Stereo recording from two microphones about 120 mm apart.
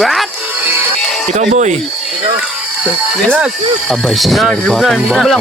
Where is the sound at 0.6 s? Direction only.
20° right (ahead or behind).